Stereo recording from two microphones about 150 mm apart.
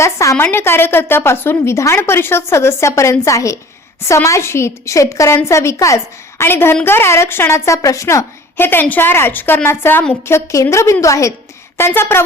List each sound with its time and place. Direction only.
0.0 s a woman's voice: 20° left (ahead or behind)